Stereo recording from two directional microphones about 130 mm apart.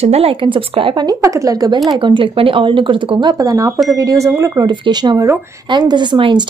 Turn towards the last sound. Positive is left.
turn(degrees=-35)  # may be behind; listen again after turning